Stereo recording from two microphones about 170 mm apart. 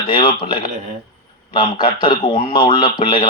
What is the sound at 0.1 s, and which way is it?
A man's voice, 30° left (ahead or behind).